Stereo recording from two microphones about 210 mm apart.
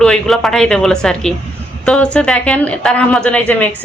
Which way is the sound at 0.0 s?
Centre (ahead or behind).